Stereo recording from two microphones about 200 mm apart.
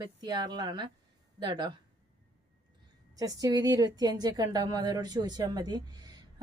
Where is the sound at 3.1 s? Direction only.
15° right (ahead or behind).